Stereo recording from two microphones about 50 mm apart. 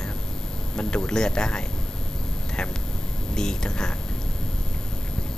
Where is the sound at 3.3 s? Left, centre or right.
Centre.